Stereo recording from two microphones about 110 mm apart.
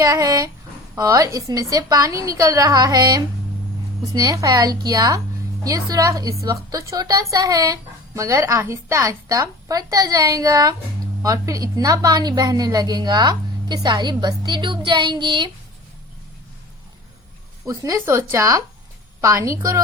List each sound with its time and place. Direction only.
0.0 s speech: 30° right (ahead or behind)
17.7 s speech: 25° right (ahead or behind)